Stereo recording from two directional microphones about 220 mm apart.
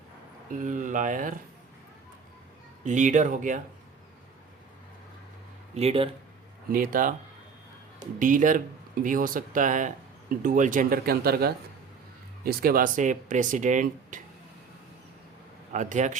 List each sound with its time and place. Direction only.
0.6 s speech: 35° right (ahead or behind)
2.8 s speech: 35° right (ahead or behind)
5.7 s speech: 25° right (ahead or behind)
6.7 s speech: 40° right (ahead or behind)
15.7 s speech: 35° right (ahead or behind)